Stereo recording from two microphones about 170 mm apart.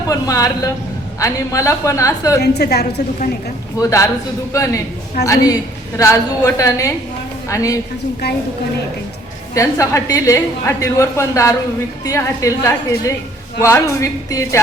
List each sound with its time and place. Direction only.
0.1 s a woman's voice: 20° left (ahead or behind)
2.4 s a woman's voice: 70° left (ahead or behind)
3.8 s a woman's voice: 20° left (ahead or behind)
9.6 s a woman's voice: 20° left (ahead or behind)